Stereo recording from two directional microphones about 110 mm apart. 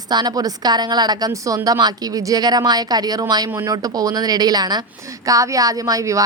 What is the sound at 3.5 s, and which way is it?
A woman's voice, 25° right (ahead or behind).